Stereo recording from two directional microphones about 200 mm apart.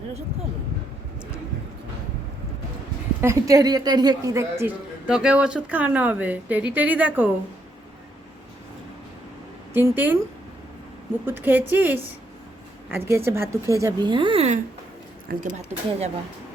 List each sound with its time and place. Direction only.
3.2 s a woman's voice: 15° right (ahead or behind)
9.7 s a woman's voice: 10° right (ahead or behind)
11.3 s a woman's voice: 10° right (ahead or behind); by 16.0 s 40° right (ahead or behind)